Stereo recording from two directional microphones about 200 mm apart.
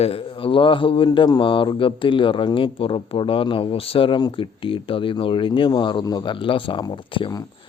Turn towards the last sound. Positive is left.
turn(degrees=20)  # may be behind; listen again after turning